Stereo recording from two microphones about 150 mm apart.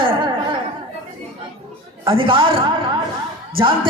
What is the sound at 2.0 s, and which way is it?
A man's voice, 35° right (ahead or behind).